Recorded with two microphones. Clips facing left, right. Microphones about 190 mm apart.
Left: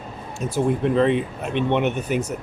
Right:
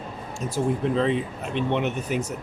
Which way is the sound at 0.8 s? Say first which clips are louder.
Left 4 dB; 60° left (ahead or behind).